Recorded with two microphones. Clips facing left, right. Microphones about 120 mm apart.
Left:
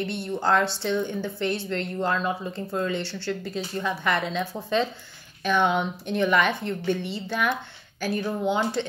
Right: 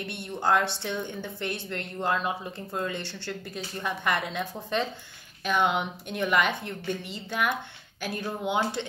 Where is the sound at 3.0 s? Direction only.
50° right (ahead or behind).